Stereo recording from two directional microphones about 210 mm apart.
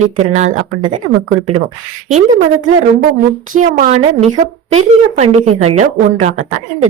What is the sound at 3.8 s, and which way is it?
Speech, 30° right (ahead or behind).